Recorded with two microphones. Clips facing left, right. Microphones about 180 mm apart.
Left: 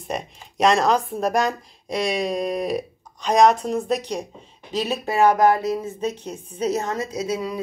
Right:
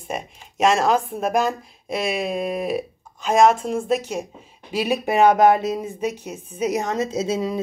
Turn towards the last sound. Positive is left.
turn(degrees=-25)  # may be behind; listen again after turning